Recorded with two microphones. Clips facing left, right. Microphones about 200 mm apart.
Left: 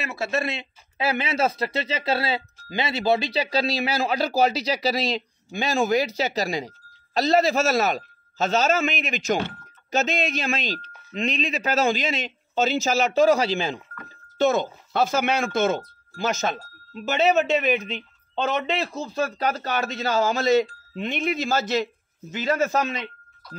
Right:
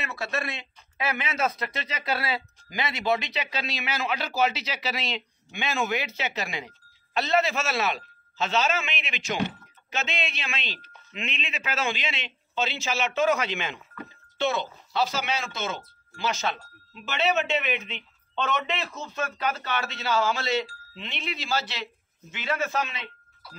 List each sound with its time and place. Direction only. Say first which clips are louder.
0.0 s speech: left 5 dB; 25° left (ahead or behind)
14.4 s speech: left 6 dB; 45° left (ahead or behind)
23.4 s speech: left 7 dB; 5° right (ahead or behind)